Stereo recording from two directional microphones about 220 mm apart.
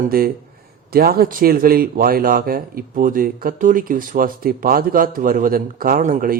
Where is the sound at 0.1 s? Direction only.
40° right (ahead or behind).